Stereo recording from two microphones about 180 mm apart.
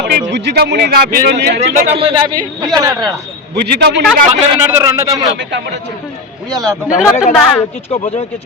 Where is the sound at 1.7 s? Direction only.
35° right (ahead or behind).